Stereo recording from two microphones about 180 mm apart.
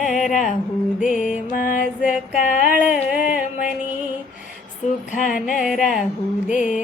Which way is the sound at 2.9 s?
50° left (ahead or behind).